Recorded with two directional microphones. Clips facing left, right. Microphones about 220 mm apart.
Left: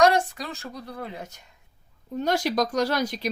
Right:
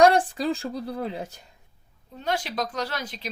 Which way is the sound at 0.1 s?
30° right (ahead or behind).